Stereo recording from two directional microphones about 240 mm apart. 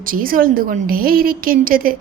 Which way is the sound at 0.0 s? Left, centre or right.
Right.